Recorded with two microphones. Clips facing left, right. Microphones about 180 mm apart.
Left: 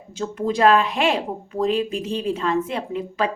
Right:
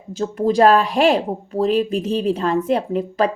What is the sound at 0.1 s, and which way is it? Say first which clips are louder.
Speech: right 5 dB; 40° right (ahead or behind).